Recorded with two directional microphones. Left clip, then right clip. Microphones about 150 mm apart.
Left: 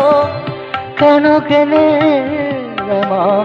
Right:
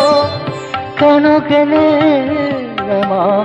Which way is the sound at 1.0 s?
15° right (ahead or behind).